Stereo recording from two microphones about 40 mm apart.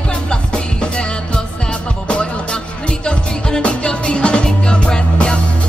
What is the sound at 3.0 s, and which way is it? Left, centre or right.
Music, left.